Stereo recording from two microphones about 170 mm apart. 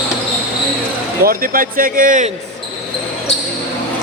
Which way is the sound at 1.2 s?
55° right (ahead or behind).